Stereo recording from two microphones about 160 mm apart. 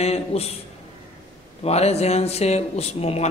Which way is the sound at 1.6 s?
40° left (ahead or behind).